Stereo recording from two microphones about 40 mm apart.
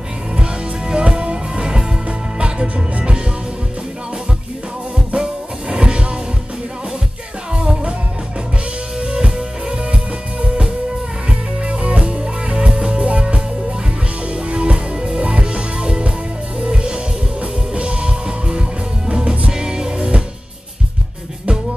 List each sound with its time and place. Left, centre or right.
0.4 s music: right
4.9 s music: right
7.5 s music: right
9.0 s music: centre